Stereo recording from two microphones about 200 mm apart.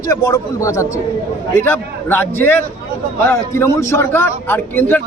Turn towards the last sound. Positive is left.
turn(degrees=10)  # may be behind; listen again after turning